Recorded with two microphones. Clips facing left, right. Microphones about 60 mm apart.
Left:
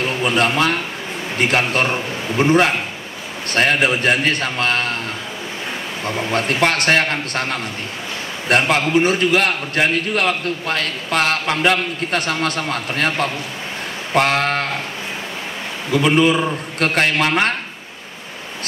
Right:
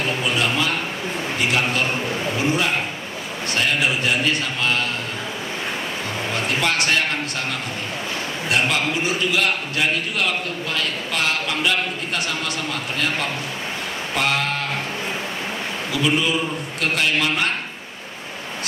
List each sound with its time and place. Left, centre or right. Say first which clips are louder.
1.4 s a man's voice: left 4 dB; left
6.3 s a man's voice: left 4 dB; left
8.5 s a man's voice: left 5 dB; left
15.9 s a man's voice: left 6 dB; left